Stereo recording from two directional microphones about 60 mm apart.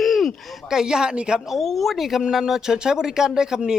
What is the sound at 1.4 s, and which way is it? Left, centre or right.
A man's voice, centre.